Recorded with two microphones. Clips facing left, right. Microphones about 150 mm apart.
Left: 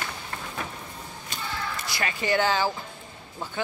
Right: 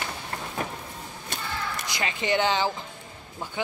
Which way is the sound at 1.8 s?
20° right (ahead or behind).